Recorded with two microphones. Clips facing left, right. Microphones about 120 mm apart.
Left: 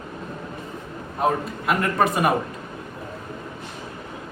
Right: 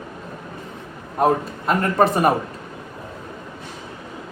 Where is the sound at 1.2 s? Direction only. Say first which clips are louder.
Right 4 dB; 35° right (ahead or behind).